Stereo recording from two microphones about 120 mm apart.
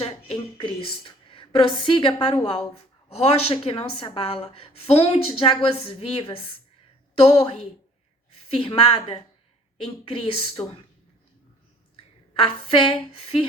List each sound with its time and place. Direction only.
0.5 s a woman's voice: 45° left (ahead or behind)
12.4 s a woman's voice: 50° left (ahead or behind)